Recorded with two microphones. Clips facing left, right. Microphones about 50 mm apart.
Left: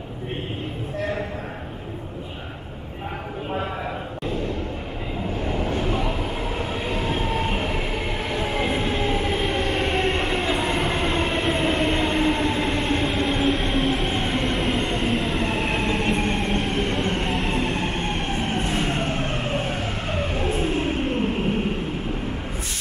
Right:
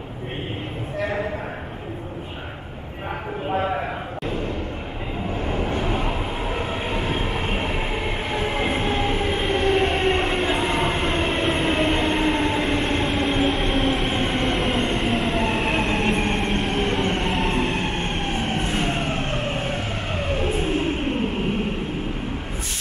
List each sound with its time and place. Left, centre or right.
5.4 s vehicle: centre
7.5 s train: centre
18.7 s fire engine: centre
19.1 s vehicle: centre